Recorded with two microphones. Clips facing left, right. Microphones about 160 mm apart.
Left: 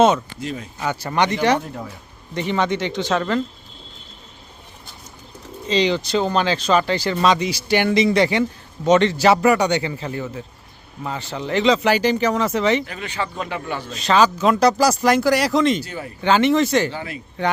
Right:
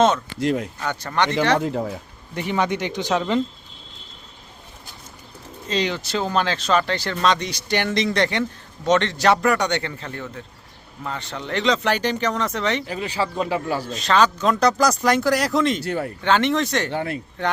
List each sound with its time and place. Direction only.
0.3 s speech: 80° right
0.8 s speech: 10° left (ahead or behind)
2.3 s speech: 10° right (ahead or behind)
5.6 s speech: centre (ahead or behind)
12.8 s speech: 30° right (ahead or behind)
13.9 s speech: centre (ahead or behind)
15.8 s speech: 65° right (ahead or behind)
16.2 s speech: 5° left (ahead or behind)
16.9 s speech: 55° right (ahead or behind)